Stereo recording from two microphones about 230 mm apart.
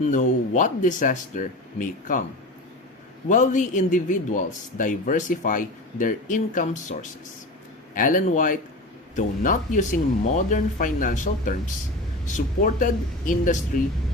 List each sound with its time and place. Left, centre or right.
0.1 s a man's voice: left
3.2 s a man's voice: left